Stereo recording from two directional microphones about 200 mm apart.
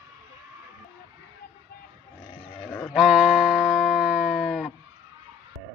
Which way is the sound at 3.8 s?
Centre (ahead or behind).